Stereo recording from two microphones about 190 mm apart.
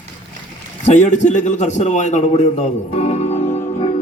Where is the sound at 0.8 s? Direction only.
40° left (ahead or behind).